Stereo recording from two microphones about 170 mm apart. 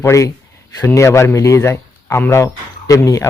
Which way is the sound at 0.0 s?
15° left (ahead or behind).